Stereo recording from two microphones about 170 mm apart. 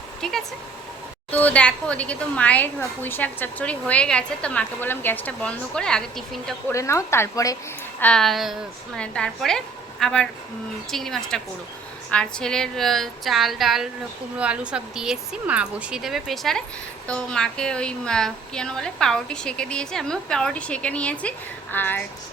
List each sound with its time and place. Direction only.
0.2 s speech: centre (ahead or behind)
6.7 s speech: 15° left (ahead or behind)
7.9 s a woman's voice: 5° left (ahead or behind)